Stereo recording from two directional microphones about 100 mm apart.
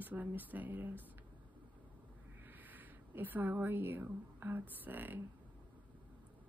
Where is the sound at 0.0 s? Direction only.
20° right (ahead or behind).